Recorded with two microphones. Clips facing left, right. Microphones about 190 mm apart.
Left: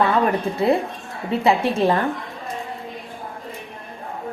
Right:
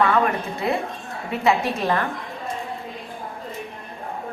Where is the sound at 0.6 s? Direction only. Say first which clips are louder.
Left 6 dB; 30° left (ahead or behind).